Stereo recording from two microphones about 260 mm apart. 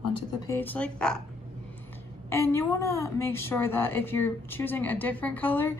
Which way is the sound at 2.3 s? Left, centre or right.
Centre.